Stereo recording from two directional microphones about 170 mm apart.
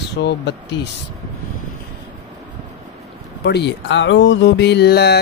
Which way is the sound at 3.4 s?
80° left.